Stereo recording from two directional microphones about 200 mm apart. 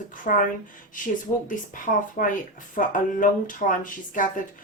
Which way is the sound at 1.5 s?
40° left (ahead or behind).